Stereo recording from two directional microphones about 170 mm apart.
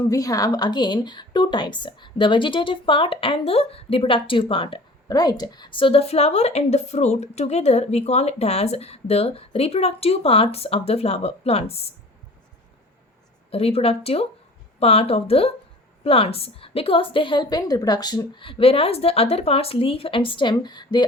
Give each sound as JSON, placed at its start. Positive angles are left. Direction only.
{"t": 0.1, "sound": "a woman's voice", "side_deg": 20}
{"t": 13.5, "sound": "a woman's voice", "side_deg": 35}